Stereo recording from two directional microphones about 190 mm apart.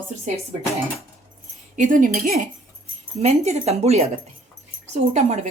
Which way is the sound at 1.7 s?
40° right (ahead or behind).